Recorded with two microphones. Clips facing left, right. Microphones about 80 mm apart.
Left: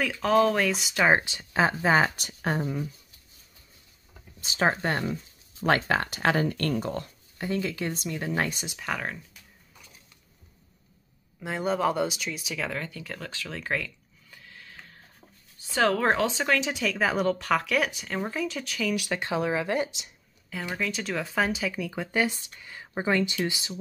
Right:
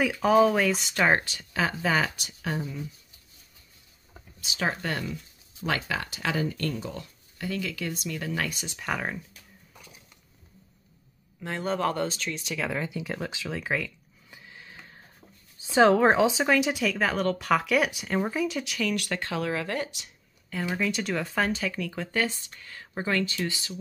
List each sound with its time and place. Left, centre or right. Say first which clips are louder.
0.0 s speech: right 2 dB; centre
1.2 s speech: left 4 dB; left
2.1 s speech: left 3 dB; left
4.4 s speech: left 4 dB; left
7.3 s speech: left 3 dB; left
8.7 s speech: right 3 dB; centre
11.4 s speech: left 2 dB; centre
12.7 s speech: right 4 dB; centre
14.3 s a sound: right 1 dB; centre
15.7 s speech: right 4 dB; centre
19.2 s speech: left 5 dB; centre
20.7 s speech: right 1 dB; centre